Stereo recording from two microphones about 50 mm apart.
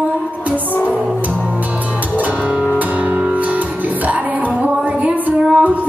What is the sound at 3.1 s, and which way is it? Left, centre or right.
Music, right.